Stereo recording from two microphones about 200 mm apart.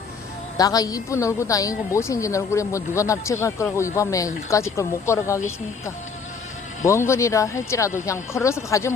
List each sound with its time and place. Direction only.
0.5 s speech: 20° left (ahead or behind)
6.8 s speech: 15° left (ahead or behind)